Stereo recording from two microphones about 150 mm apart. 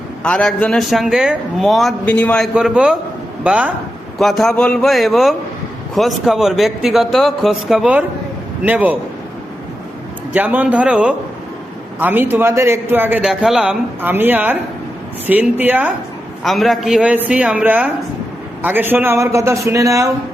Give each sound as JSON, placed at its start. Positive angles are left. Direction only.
{"t": 0.2, "sound": "a man's voice", "side_deg": 5}
{"t": 2.6, "sound": "a man's voice", "side_deg": -5}
{"t": 4.2, "sound": "a man's voice", "side_deg": 0}
{"t": 10.3, "sound": "a man's voice", "side_deg": -10}
{"t": 16.4, "sound": "a man's voice", "side_deg": 0}